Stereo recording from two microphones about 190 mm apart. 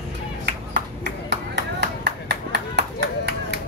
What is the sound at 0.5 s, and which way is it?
Clapping, 65° right (ahead or behind).